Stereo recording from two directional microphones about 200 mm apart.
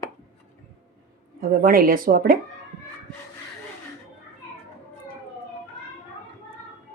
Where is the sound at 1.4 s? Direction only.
45° right (ahead or behind).